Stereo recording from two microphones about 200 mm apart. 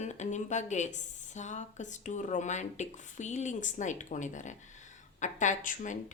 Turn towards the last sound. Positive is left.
turn(degrees=40)  # may be behind; listen again after turning